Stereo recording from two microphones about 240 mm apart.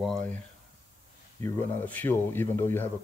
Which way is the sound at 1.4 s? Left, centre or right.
Centre.